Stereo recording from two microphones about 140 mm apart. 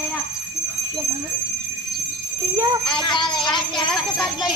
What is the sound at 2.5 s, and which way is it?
Jingle bell, 25° right (ahead or behind).